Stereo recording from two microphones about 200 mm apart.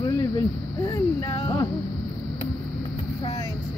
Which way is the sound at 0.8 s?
15° left (ahead or behind).